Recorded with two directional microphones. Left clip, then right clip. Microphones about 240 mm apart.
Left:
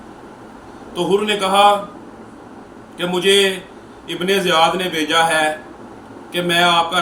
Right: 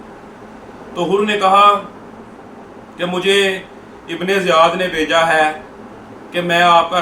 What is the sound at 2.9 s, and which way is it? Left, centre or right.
Speech, centre.